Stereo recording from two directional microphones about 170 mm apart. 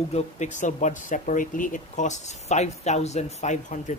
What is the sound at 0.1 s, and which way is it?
Speech, 45° left (ahead or behind).